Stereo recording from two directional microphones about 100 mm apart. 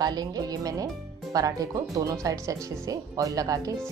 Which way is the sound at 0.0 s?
40° right (ahead or behind).